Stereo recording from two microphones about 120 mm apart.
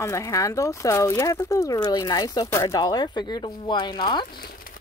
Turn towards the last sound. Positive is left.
turn(degrees=40)  # may be behind; listen again after turning